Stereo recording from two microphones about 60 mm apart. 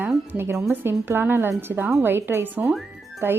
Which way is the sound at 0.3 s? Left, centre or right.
Right.